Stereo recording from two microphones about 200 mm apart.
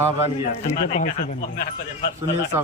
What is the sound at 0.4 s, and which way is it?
Speech, 35° left (ahead or behind).